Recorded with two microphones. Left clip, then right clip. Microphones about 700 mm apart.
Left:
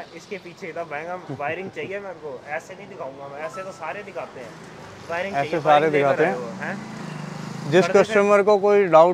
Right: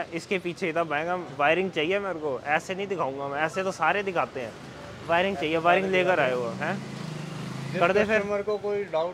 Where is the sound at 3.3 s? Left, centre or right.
Right.